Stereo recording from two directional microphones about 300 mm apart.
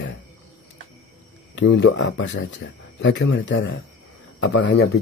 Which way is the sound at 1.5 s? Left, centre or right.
Left.